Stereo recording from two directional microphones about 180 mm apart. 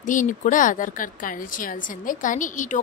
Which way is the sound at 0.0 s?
45° left (ahead or behind).